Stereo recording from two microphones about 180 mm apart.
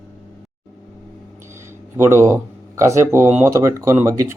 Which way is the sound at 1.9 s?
15° right (ahead or behind).